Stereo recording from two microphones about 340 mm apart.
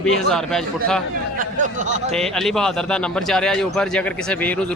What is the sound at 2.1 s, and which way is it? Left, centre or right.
Speech, centre.